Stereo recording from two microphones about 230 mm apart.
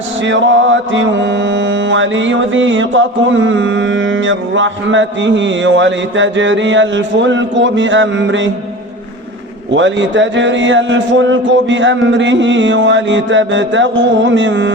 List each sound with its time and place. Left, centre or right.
0.2 s mantra: right
9.7 s mantra: right